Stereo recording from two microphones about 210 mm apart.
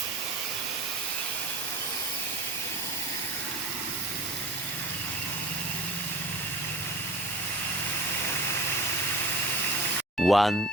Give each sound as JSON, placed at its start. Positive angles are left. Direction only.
{"t": 10.2, "sound": "speech", "side_deg": 0}